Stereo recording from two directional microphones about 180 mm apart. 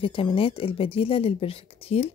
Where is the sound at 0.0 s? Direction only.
30° left (ahead or behind).